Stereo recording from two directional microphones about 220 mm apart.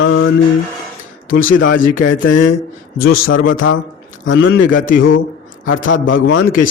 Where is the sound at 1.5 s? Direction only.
60° left (ahead or behind).